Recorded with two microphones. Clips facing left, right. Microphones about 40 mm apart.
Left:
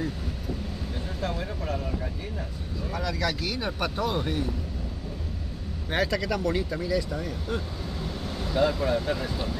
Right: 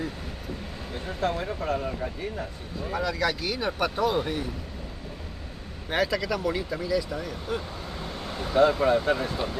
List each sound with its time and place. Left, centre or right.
0.9 s speech: centre
5.9 s speech: centre
8.0 s speech: right